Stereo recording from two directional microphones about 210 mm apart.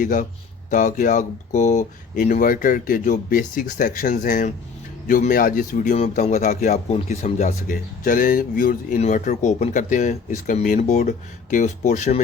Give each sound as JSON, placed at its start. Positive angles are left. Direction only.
{"t": 0.0, "sound": "speech", "side_deg": 40}